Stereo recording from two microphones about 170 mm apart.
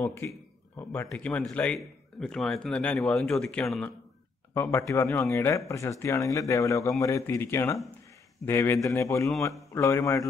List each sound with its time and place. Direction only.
0.1 s speech: 15° left (ahead or behind)